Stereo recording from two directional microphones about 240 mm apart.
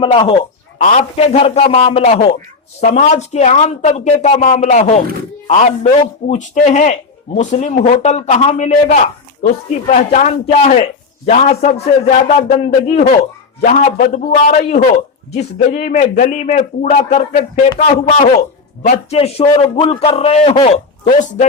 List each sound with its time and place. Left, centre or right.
0.0 s a man's voice: left